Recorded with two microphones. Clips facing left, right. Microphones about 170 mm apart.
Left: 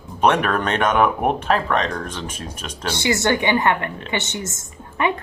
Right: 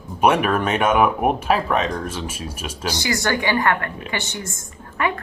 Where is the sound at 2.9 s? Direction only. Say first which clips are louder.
Left 4 dB; 25° left (ahead or behind).